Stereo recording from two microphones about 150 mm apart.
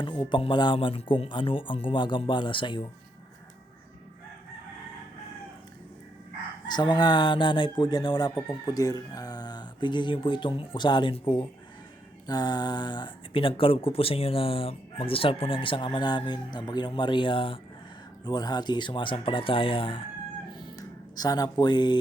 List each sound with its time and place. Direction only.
0.0 s speech: 30° left (ahead or behind)
6.7 s speech: 30° left (ahead or behind)
20.6 s music: 25° left (ahead or behind)
21.6 s speech: 30° left (ahead or behind)